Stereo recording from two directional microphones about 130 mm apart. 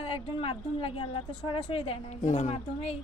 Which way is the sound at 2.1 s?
65° left (ahead or behind).